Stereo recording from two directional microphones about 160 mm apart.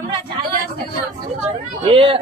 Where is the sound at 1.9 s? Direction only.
35° right (ahead or behind).